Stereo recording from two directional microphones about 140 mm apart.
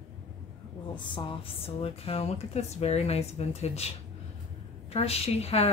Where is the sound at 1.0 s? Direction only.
35° left (ahead or behind).